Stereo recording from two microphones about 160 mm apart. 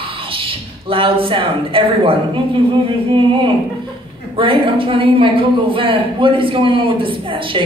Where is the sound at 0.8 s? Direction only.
35° right (ahead or behind).